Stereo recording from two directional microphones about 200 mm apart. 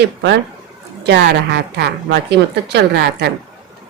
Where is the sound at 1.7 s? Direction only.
55° right (ahead or behind).